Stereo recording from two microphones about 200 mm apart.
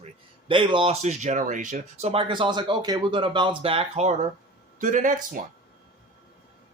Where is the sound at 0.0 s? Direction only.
25° right (ahead or behind).